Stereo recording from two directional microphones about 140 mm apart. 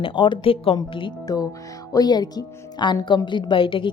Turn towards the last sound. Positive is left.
turn(degrees=35)  # may be behind; listen again after turning